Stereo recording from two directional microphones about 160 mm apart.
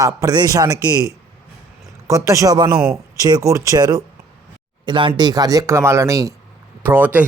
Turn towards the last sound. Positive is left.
turn(degrees=-10)  # may be behind; listen again after turning